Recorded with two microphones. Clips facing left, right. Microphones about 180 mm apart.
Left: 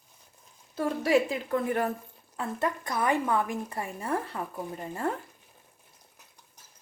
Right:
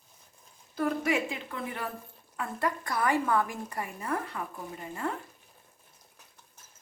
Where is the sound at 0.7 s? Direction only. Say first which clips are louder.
Left 4 dB; 35° left (ahead or behind).